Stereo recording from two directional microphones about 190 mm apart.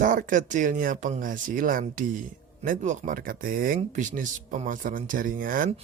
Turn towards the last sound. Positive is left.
turn(degrees=-45)  # may be behind; listen again after turning